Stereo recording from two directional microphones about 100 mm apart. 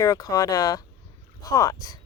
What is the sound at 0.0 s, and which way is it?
Speech, 35° left (ahead or behind).